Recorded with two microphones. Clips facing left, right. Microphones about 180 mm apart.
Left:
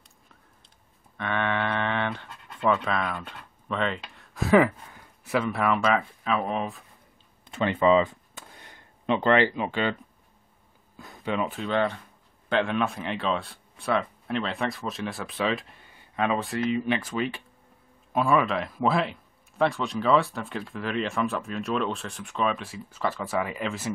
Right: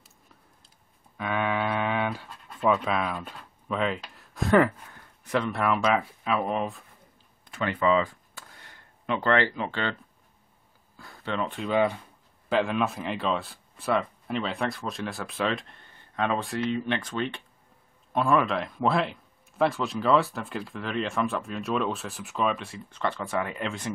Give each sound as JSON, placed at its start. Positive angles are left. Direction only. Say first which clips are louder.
{"t": 1.1, "sound": "speech", "louder": "even", "side_deg": -5}
{"t": 7.4, "sound": "a sound", "louder": "left 3 dB", "side_deg": 25}
{"t": 11.0, "sound": "speech", "louder": "left 2 dB", "side_deg": 15}
{"t": 11.6, "sound": "speech", "louder": "right 5 dB", "side_deg": -5}